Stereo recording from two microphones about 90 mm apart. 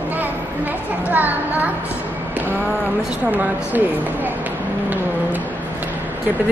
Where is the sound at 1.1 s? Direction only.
20° right (ahead or behind).